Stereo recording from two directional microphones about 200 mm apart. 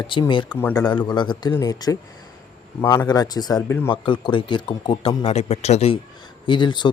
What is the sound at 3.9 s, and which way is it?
A man's voice, 25° left (ahead or behind).